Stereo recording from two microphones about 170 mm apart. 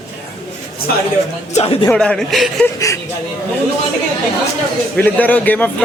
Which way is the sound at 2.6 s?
20° left (ahead or behind).